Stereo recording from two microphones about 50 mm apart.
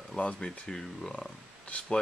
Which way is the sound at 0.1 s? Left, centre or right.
Centre.